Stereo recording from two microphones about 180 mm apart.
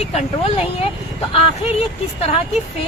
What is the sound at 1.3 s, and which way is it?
Speech, 35° left (ahead or behind).